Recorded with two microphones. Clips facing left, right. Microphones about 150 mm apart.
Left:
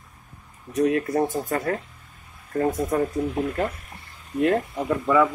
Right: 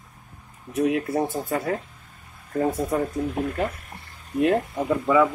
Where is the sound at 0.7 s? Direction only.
15° right (ahead or behind).